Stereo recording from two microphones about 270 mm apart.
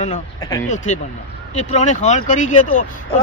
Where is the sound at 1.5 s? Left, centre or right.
Left.